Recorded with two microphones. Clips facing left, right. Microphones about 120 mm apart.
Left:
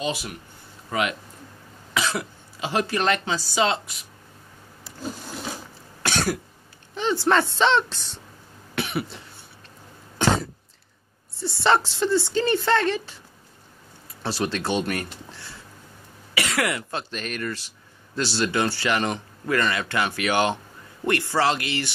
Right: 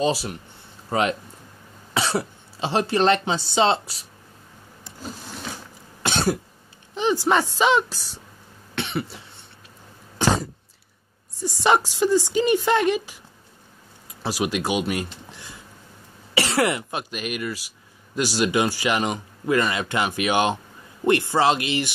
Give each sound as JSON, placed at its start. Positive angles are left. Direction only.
{"t": 0.0, "sound": "speech", "side_deg": -35}
{"t": 6.0, "sound": "cough", "side_deg": -25}
{"t": 7.0, "sound": "speech", "side_deg": -15}
{"t": 8.7, "sound": "cough", "side_deg": 0}
{"t": 11.3, "sound": "speech", "side_deg": -15}
{"t": 14.2, "sound": "speech", "side_deg": -10}
{"t": 16.3, "sound": "speech", "side_deg": -30}
{"t": 17.1, "sound": "speech", "side_deg": -10}